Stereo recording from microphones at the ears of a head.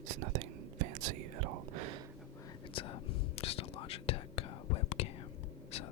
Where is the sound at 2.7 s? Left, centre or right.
Left.